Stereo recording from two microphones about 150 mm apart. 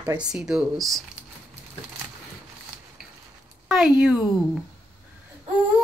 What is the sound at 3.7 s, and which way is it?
Speech, 5° right (ahead or behind).